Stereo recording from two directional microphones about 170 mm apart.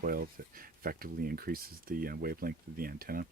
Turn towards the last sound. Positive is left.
turn(degrees=-60)  # may be behind; listen again after turning